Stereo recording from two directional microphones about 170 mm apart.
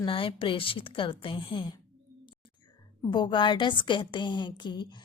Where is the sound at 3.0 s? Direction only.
25° left (ahead or behind).